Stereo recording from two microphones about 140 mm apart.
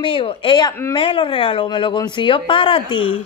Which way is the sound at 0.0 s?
35° left (ahead or behind).